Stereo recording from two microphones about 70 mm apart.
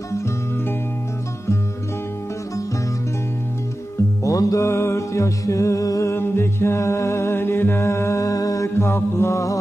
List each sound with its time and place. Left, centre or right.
4.2 s music: left
6.1 s music: left